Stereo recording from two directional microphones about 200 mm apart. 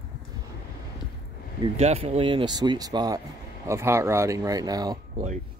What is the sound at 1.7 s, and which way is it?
Speech, 30° right (ahead or behind).